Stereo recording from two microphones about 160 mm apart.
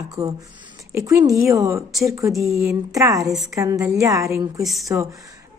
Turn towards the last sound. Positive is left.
turn(degrees=0)  # may be behind; listen again after turning